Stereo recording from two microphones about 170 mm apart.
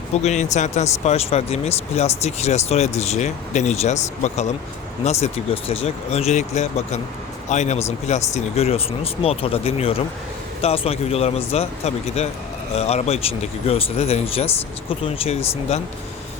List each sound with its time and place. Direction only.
0.2 s speech: 40° left (ahead or behind)